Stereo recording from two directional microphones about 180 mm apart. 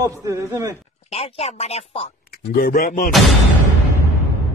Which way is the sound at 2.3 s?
50° left (ahead or behind).